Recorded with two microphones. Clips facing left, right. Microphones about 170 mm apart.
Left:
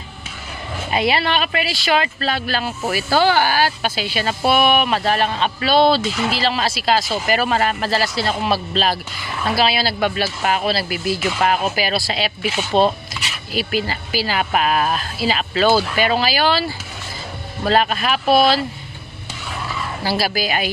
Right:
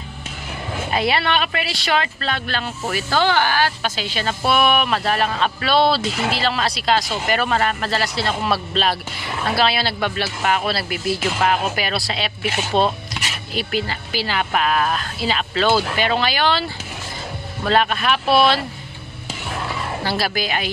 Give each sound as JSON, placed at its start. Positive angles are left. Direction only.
{"t": 0.8, "sound": "speech", "side_deg": 0}
{"t": 10.4, "sound": "speech", "side_deg": 35}
{"t": 10.7, "sound": "speech", "side_deg": 0}
{"t": 13.1, "sound": "a sound", "side_deg": 0}
{"t": 13.5, "sound": "speech", "side_deg": 5}
{"t": 20.0, "sound": "speech", "side_deg": 5}